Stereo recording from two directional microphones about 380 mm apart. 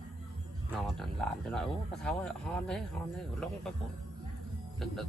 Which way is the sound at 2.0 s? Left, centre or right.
Centre.